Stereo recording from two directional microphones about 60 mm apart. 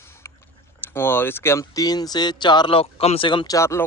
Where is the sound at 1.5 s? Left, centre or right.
Left.